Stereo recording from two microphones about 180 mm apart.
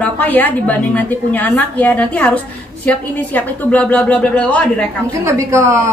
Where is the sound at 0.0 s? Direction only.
10° left (ahead or behind).